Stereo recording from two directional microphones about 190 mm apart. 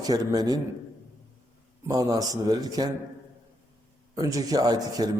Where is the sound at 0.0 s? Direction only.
20° right (ahead or behind).